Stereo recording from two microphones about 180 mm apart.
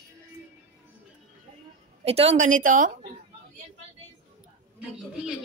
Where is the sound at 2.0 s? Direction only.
35° right (ahead or behind).